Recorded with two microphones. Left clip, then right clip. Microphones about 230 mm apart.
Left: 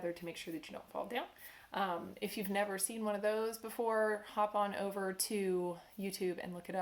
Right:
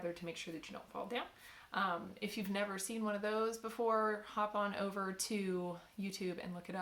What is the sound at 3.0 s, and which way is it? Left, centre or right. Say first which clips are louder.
Speech: left 2 dB; right.